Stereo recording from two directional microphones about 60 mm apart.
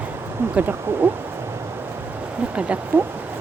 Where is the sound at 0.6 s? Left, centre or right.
Right.